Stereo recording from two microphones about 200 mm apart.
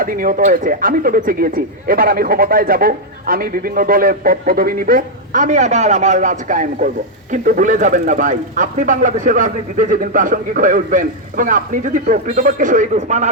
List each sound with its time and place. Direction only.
0.0 s speech: 45° right (ahead or behind)